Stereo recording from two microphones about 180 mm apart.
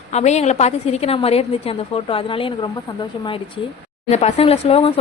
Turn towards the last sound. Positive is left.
turn(degrees=35)  # may be behind; listen again after turning